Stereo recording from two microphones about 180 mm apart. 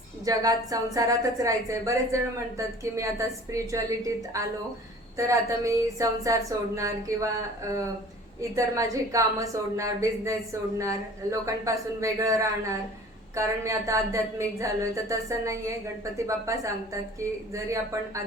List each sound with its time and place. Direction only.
0.3 s a woman's voice: 20° right (ahead or behind)
8.4 s a woman's voice: 15° right (ahead or behind)